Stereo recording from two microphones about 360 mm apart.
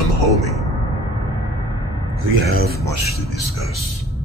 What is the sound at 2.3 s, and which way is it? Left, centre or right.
Speech, right.